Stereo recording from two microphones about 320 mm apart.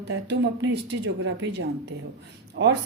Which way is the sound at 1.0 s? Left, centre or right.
Right.